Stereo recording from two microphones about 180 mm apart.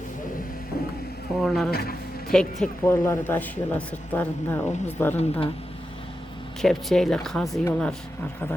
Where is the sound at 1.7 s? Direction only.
55° left (ahead or behind).